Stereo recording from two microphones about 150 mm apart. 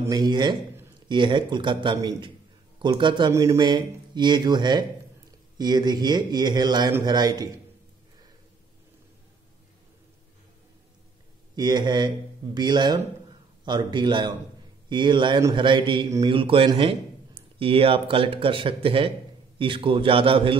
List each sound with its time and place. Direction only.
0.0 s a man's voice: 25° right (ahead or behind)
11.5 s a man's voice: 30° right (ahead or behind)